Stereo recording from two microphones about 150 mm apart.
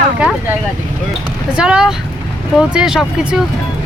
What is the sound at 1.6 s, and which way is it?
Speech, 5° right (ahead or behind).